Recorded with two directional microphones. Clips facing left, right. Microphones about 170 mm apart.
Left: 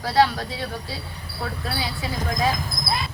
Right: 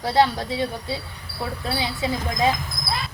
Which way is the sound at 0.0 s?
20° right (ahead or behind).